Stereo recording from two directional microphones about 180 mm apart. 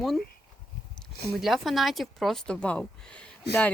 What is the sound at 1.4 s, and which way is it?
A woman's voice, centre (ahead or behind).